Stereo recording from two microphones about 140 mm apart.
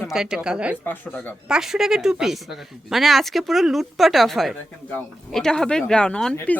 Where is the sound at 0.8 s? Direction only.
15° left (ahead or behind).